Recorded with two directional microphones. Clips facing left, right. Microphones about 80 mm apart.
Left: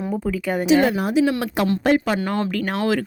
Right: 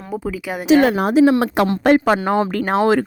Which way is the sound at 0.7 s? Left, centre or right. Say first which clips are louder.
Right 4 dB; right.